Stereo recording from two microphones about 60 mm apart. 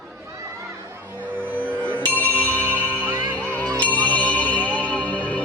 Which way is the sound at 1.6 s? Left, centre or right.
Left.